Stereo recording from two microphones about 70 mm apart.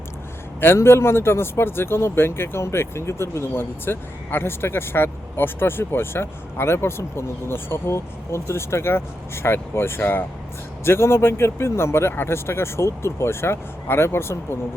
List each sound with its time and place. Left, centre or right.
0.6 s speech: left